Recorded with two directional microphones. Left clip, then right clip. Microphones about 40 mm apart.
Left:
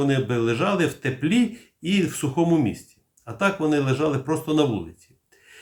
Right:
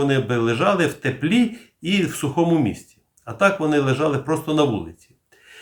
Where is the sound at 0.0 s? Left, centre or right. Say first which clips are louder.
Right 3 dB; right.